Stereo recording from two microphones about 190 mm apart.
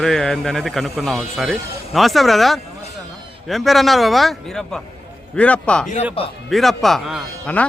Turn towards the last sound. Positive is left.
turn(degrees=5)  # may be behind; listen again after turning